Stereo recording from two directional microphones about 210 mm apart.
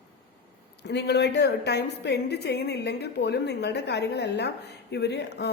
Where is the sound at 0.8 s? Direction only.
55° left (ahead or behind).